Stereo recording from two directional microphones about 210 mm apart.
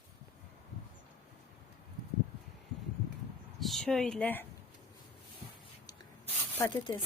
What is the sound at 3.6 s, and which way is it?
Speech, centre (ahead or behind).